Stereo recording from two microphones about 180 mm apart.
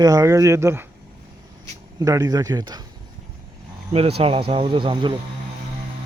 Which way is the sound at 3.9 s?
35° right (ahead or behind).